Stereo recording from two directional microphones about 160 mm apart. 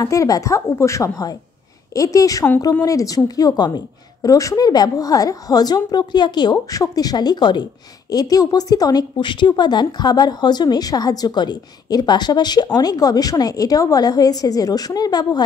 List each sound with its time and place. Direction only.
0.0 s a woman's voice: 20° left (ahead or behind)